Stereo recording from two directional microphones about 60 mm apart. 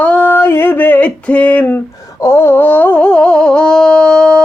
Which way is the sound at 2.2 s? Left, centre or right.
Left.